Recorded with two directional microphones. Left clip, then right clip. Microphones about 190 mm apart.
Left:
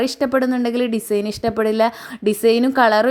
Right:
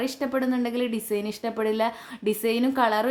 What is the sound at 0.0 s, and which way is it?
Speech, 40° left (ahead or behind).